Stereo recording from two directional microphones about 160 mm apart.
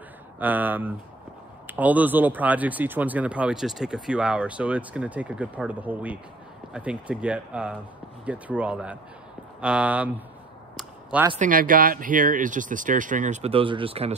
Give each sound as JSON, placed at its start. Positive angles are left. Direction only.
{"t": 0.4, "sound": "speech", "side_deg": -10}
{"t": 10.8, "sound": "a sound", "side_deg": -10}
{"t": 11.3, "sound": "speech", "side_deg": -55}